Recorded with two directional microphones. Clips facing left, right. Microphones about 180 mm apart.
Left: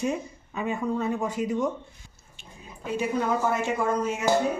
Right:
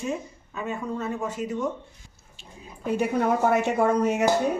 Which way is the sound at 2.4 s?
35° right (ahead or behind).